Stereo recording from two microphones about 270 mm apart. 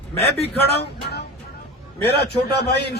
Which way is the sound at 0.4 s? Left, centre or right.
Left.